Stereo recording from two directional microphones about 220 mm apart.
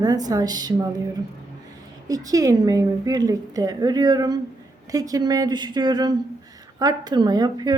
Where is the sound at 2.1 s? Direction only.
15° right (ahead or behind).